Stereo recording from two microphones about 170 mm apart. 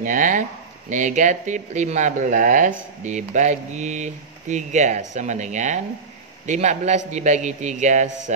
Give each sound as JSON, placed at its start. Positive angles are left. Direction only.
{"t": 0.0, "sound": "speech", "side_deg": -50}